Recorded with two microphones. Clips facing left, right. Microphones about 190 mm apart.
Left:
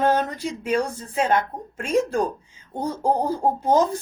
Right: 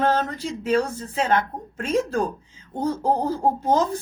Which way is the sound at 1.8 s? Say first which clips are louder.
Left 1 dB; 15° left (ahead or behind).